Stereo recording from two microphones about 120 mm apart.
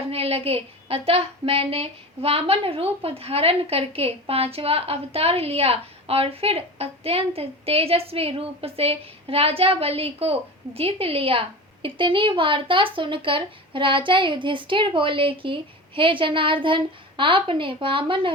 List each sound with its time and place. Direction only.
0.1 s a woman's voice: 55° right (ahead or behind)